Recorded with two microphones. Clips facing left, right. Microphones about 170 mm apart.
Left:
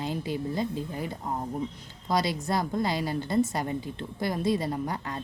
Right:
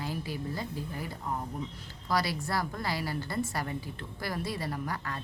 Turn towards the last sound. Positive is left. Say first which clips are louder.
# left 4 dB
turn(degrees=20)  # may be behind; listen again after turning